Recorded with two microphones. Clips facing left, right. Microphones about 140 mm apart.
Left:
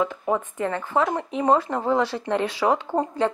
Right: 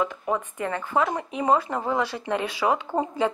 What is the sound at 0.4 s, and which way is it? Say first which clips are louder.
Speech: left 2 dB; 15° right (ahead or behind).